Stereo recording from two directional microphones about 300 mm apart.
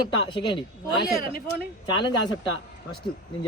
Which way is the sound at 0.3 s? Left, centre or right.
Centre.